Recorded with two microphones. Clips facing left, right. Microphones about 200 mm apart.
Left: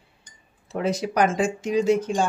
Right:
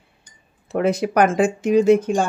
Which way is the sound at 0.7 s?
55° right (ahead or behind).